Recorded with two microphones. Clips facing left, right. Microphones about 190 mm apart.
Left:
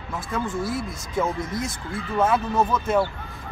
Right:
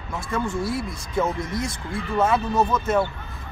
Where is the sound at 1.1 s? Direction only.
5° left (ahead or behind).